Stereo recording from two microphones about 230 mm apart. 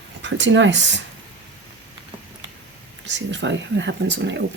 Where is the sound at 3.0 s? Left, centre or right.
Right.